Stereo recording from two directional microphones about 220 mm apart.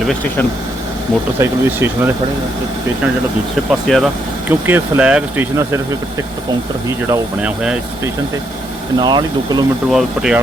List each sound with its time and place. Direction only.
1.4 s speech: 10° right (ahead or behind)
3.7 s speech: centre (ahead or behind)
7.1 s speech: 5° right (ahead or behind)
9.0 s speech: 20° right (ahead or behind)
9.9 s speech: centre (ahead or behind)